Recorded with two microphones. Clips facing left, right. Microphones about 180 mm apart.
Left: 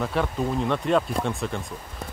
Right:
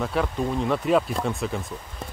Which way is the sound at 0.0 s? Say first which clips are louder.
Even; centre (ahead or behind).